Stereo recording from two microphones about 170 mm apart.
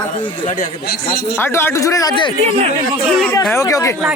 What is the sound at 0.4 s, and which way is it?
Speech, 55° left (ahead or behind).